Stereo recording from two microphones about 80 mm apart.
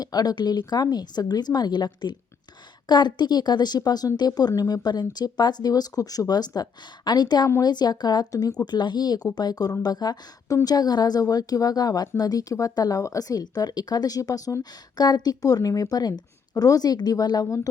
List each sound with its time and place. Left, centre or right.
0.0 s speech: left
8.6 s a woman's voice: left
14.6 s speech: left
17.4 s speech: left